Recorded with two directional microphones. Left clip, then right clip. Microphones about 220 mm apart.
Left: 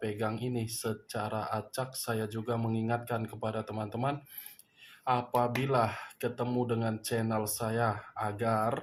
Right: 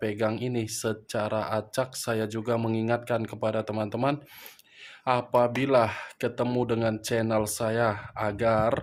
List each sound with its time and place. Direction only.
0.0 s speech: 40° right (ahead or behind)